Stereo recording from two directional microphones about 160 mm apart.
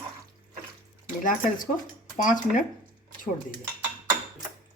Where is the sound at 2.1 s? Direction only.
55° left (ahead or behind).